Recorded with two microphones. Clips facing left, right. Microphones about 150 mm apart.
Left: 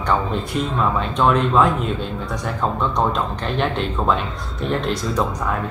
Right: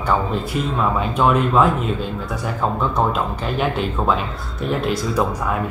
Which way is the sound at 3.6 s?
5° right (ahead or behind).